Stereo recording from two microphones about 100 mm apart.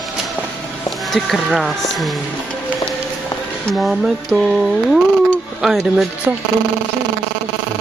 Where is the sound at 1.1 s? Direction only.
Centre (ahead or behind).